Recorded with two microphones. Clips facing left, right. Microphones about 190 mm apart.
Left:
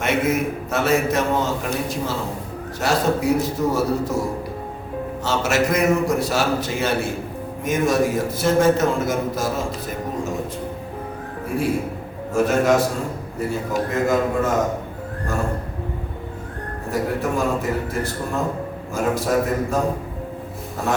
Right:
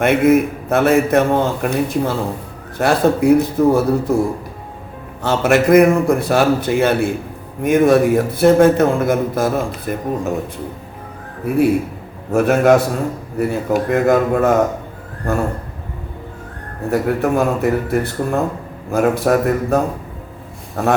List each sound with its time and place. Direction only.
0.0 s a man's voice: 55° right (ahead or behind)
5.2 s a man's voice: 55° right (ahead or behind)
12.3 s a man's voice: 60° right (ahead or behind)
16.9 s a man's voice: 60° right (ahead or behind)